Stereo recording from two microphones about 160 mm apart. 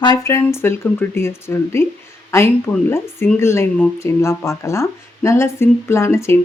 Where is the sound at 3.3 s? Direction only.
15° left (ahead or behind).